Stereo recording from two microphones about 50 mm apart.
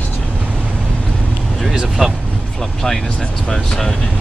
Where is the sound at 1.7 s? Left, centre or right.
Centre.